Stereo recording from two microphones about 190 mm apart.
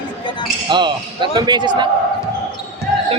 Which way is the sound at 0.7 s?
25° right (ahead or behind).